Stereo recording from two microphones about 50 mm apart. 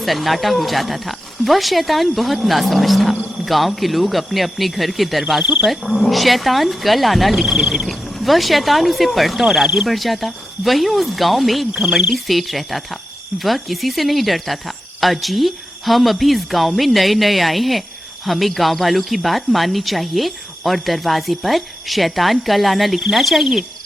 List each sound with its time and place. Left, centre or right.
0.0 s speech: centre
5.2 s speech: centre
5.6 s speech: centre
7.9 s speech: centre
11.7 s speech: centre
11.9 s speech: centre